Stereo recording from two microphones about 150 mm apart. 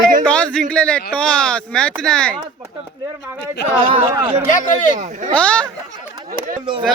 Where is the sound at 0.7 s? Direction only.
5° left (ahead or behind).